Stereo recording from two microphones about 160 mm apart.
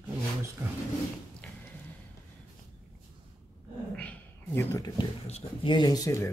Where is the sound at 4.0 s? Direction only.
5° left (ahead or behind).